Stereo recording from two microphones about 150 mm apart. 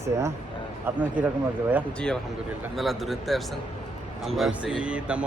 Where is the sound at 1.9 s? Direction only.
5° left (ahead or behind).